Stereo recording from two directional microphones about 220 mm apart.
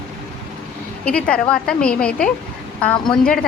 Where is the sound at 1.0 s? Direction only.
5° left (ahead or behind).